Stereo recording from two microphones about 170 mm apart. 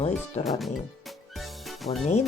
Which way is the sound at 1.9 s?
35° left (ahead or behind).